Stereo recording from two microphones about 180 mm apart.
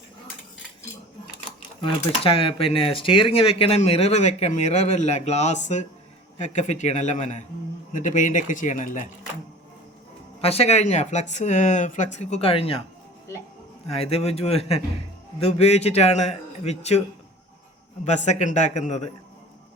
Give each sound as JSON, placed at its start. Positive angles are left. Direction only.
{"t": 1.8, "sound": "speech", "side_deg": 30}
{"t": 10.4, "sound": "speech", "side_deg": 35}
{"t": 13.9, "sound": "speech", "side_deg": 35}
{"t": 18.0, "sound": "speech", "side_deg": 40}